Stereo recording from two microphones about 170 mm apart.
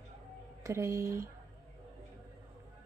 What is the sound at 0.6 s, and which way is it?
Speech, 15° right (ahead or behind).